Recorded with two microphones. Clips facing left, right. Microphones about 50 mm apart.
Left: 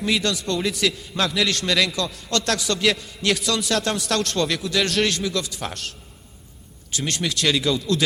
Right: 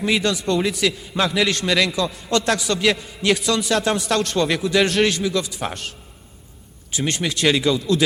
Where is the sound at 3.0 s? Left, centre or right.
Centre.